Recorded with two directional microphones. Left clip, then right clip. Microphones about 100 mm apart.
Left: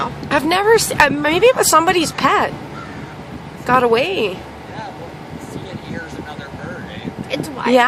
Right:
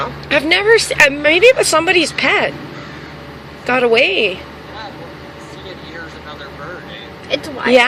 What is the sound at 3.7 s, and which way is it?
Speech, 30° left (ahead or behind).